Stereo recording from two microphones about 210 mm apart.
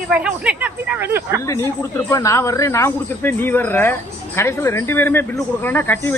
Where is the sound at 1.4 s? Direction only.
15° left (ahead or behind).